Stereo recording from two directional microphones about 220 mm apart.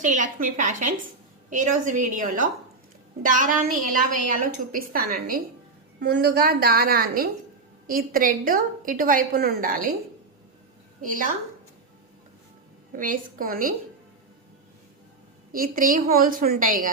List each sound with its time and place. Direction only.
0.0 s a woman's voice: 35° right (ahead or behind)
11.0 s a woman's voice: 35° right (ahead or behind)
13.0 s a woman's voice: 40° right (ahead or behind)
15.5 s a woman's voice: 40° right (ahead or behind)